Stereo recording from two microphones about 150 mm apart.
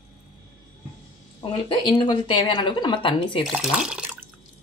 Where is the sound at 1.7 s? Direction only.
35° left (ahead or behind).